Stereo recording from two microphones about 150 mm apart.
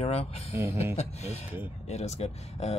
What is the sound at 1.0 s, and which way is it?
Speech, 45° left (ahead or behind).